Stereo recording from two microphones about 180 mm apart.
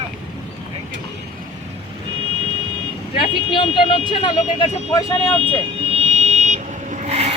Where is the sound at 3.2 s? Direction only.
30° left (ahead or behind).